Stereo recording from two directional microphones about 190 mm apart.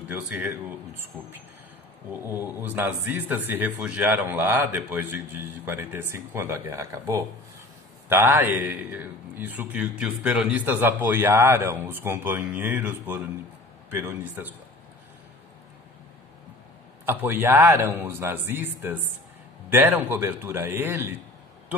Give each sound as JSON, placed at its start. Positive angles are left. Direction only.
{"t": 0.1, "sound": "a man's voice", "side_deg": -10}
{"t": 2.4, "sound": "a man's voice", "side_deg": -10}
{"t": 17.0, "sound": "a man's voice", "side_deg": -10}